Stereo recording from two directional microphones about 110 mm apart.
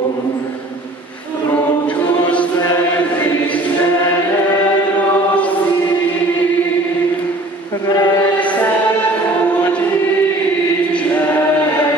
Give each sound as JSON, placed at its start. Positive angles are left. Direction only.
{"t": 7.8, "sound": "music", "side_deg": 30}
{"t": 10.9, "sound": "chant", "side_deg": 15}